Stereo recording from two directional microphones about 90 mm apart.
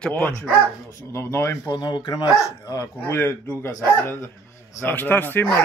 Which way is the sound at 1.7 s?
55° left (ahead or behind).